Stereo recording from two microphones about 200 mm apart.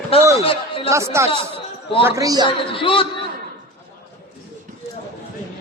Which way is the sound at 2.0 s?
15° right (ahead or behind).